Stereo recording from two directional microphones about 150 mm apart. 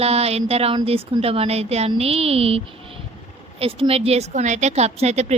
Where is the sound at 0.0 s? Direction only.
45° right (ahead or behind).